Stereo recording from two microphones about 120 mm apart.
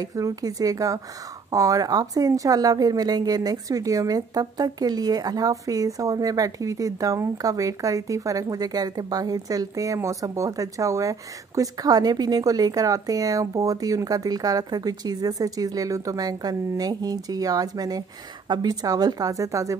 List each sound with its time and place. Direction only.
0.0 s a woman's voice: 30° right (ahead or behind)